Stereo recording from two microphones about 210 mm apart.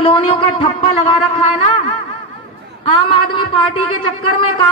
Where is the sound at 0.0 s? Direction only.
25° left (ahead or behind).